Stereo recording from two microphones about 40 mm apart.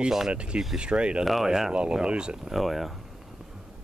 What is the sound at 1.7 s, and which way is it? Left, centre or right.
Speech, right.